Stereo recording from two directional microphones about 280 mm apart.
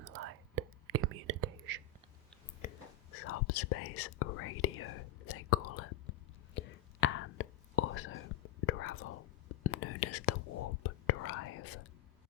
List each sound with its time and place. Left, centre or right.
0.0 s whispering: right
2.6 s whispering: left
3.2 s whispering: left
6.5 s whispering: left